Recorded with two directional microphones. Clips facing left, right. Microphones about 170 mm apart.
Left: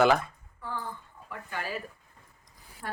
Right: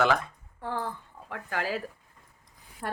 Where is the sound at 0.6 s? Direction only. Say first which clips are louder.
Right 5 dB; 65° right (ahead or behind).